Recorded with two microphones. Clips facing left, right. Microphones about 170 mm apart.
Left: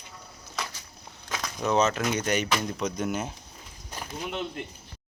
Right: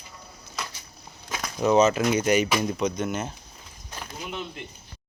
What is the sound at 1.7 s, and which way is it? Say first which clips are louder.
Speech: right 5 dB; 5° right (ahead or behind).